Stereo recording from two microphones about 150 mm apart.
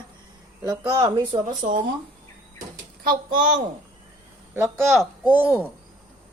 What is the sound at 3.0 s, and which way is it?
Speech, 70° right (ahead or behind).